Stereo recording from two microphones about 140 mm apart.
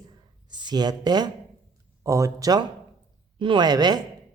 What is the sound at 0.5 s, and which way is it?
Speech, 30° right (ahead or behind).